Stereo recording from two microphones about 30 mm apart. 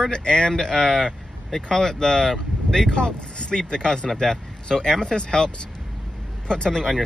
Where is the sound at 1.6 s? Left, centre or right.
Centre.